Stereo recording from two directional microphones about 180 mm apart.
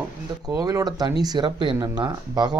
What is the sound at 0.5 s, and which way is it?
Speech, 20° right (ahead or behind).